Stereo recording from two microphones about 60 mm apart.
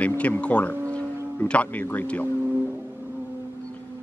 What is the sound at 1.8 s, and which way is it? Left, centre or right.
Speech, left.